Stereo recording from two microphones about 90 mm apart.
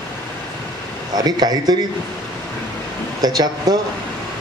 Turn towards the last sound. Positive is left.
turn(degrees=-50)  # may be behind; listen again after turning